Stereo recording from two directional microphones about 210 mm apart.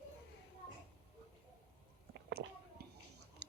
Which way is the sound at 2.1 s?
50° right (ahead or behind).